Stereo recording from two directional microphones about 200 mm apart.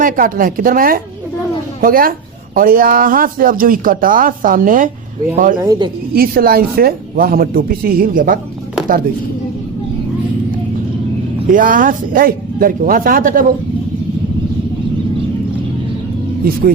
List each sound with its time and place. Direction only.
0.0 s speech: 45° right (ahead or behind)
5.5 s speech: 20° right (ahead or behind)
6.1 s speech: 50° right (ahead or behind)
11.5 s speech: 40° right (ahead or behind)
16.4 s speech: 45° right (ahead or behind)